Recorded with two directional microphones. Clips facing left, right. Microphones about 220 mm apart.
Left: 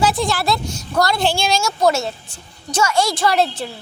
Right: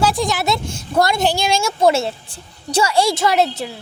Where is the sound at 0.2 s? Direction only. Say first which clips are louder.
Even; 20° right (ahead or behind).